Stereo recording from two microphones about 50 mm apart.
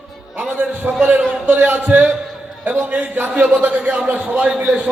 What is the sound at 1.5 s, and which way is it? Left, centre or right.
Speech, right.